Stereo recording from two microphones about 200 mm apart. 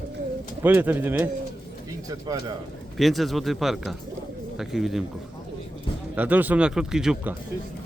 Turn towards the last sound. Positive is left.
turn(degrees=-5)  # may be behind; listen again after turning